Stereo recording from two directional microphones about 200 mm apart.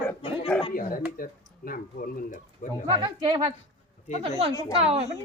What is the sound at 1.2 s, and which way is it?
Speech, 45° left (ahead or behind).